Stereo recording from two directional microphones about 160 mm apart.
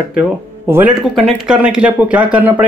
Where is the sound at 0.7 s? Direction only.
15° right (ahead or behind).